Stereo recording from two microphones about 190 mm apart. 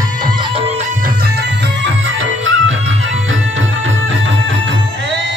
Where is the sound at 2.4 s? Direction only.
90° right.